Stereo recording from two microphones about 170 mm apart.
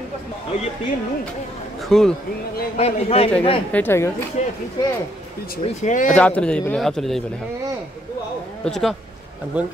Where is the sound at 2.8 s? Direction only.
35° left (ahead or behind).